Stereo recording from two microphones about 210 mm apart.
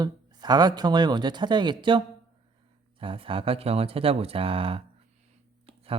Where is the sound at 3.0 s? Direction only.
25° right (ahead or behind).